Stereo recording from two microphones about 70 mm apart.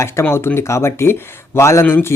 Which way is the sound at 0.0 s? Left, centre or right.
Left.